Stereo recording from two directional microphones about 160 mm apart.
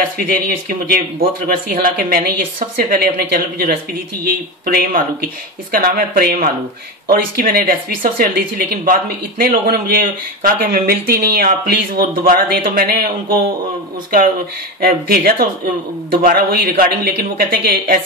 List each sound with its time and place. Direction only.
0.0 s speech: 60° right (ahead or behind)
14.8 s speech: 70° right (ahead or behind)